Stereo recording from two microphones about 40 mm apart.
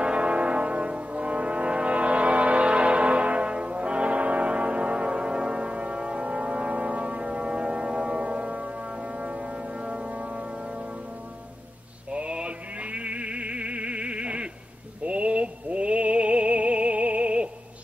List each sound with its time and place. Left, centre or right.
0.0 s brass instrument: right
12.1 s music: right